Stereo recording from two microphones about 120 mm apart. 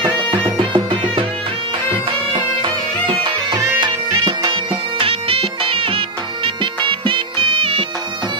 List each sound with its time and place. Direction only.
0.3 s music: 45° right (ahead or behind)
2.3 s music: 45° right (ahead or behind)